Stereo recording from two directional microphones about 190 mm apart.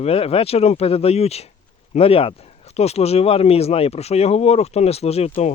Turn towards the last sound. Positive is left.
turn(degrees=35)  # may be behind; listen again after turning